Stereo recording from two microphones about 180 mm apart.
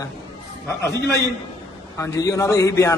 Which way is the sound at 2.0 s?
20° left (ahead or behind).